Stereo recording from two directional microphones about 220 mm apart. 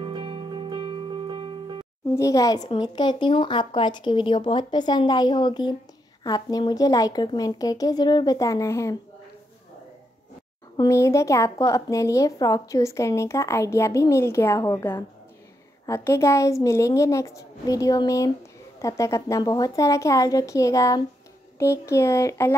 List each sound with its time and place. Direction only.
0.0 s music: 20° right (ahead or behind)
2.1 s a woman's voice: 15° left (ahead or behind)
10.8 s a woman's voice: 15° left (ahead or behind)